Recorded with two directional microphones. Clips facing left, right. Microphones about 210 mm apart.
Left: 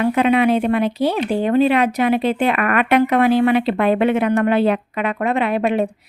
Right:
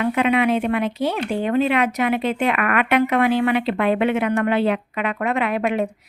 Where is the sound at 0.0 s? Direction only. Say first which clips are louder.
Left 3 dB; 35° left (ahead or behind).